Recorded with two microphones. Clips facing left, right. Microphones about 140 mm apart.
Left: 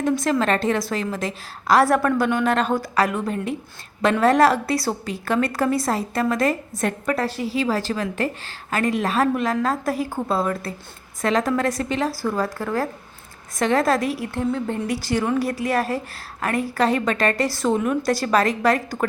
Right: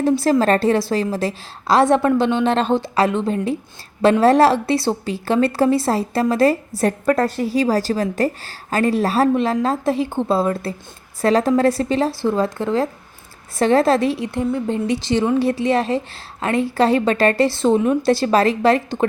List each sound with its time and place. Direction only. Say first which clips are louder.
0.0 s a woman's voice: right 5 dB; 35° right (ahead or behind)